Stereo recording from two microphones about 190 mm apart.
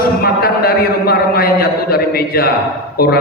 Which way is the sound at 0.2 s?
55° left (ahead or behind).